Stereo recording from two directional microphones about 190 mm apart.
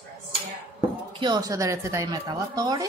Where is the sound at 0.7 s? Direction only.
25° right (ahead or behind).